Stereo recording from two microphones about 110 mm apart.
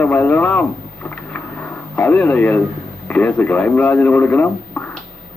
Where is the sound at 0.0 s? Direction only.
15° left (ahead or behind).